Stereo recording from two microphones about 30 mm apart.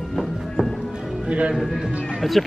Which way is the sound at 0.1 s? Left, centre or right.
Centre.